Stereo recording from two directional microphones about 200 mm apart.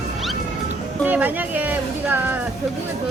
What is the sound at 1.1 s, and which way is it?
Speech, 10° right (ahead or behind).